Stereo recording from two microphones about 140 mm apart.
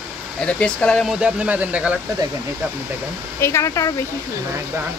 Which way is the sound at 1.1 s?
5° right (ahead or behind).